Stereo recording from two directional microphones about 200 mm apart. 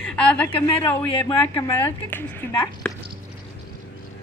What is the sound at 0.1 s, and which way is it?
A woman's voice, 5° left (ahead or behind).